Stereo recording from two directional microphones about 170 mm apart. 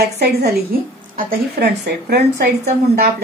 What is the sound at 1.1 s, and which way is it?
A woman's voice, 55° right (ahead or behind).